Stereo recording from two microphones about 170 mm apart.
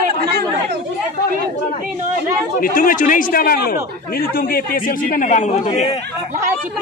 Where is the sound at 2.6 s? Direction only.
55° left (ahead or behind).